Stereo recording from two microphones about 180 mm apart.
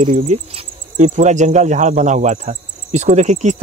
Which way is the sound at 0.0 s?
40° right (ahead or behind).